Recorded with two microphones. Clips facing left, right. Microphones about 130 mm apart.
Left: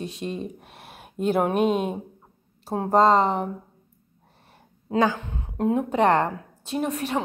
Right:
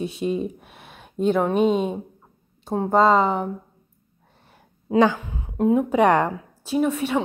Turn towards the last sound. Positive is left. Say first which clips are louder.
# right 4 dB
turn(degrees=0)  # may be behind; listen again after turning